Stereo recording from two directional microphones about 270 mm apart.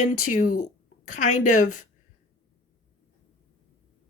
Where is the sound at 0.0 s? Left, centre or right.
Left.